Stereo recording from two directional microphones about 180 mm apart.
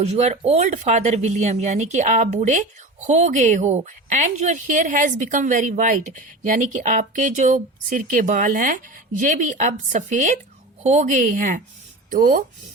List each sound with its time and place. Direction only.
0.0 s speech: 35° right (ahead or behind)